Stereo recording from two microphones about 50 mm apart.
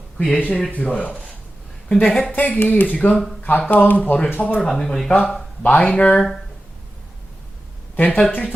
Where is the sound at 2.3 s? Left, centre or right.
Left.